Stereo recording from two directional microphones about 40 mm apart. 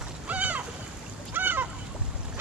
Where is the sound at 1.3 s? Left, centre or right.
Right.